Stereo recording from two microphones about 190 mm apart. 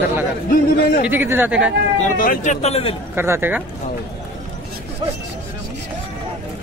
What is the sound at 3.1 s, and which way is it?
Speech, 10° right (ahead or behind).